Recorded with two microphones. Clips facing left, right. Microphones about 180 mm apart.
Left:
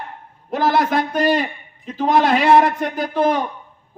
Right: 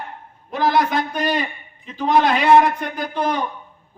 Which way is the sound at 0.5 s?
45° left (ahead or behind).